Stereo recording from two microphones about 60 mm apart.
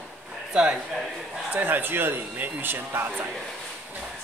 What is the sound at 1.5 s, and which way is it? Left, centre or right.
Speech, right.